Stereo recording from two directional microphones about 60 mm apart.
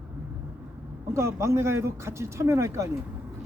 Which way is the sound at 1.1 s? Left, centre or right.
Right.